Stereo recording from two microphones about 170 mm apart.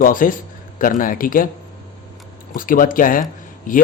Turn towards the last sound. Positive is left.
turn(degrees=50)  # may be behind; listen again after turning